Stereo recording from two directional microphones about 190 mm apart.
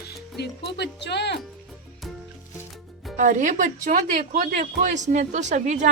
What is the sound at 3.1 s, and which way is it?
A woman's voice, 40° right (ahead or behind).